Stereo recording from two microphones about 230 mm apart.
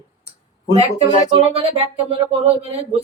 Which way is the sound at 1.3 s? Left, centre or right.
Right.